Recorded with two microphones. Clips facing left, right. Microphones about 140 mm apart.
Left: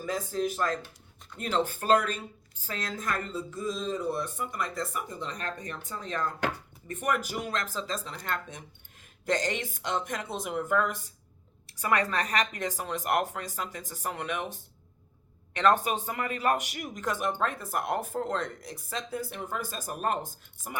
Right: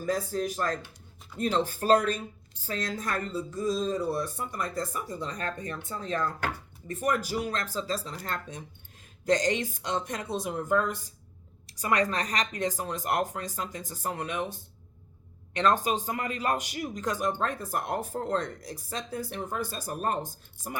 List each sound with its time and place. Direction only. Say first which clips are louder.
0.0 s speech: right 1 dB; 45° right (ahead or behind)
15.5 s speech: left 1 dB; 35° right (ahead or behind)